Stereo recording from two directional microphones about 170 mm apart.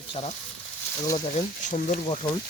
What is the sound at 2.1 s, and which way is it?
Speech, 30° left (ahead or behind).